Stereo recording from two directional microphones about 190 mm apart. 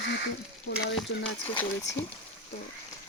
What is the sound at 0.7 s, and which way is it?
Speech, 60° left (ahead or behind).